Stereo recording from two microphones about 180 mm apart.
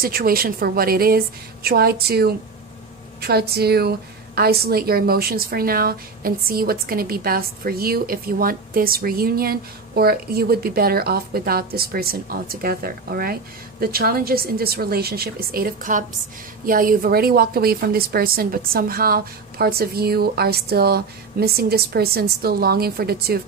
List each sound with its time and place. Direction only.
0.0 s speech: 55° right (ahead or behind)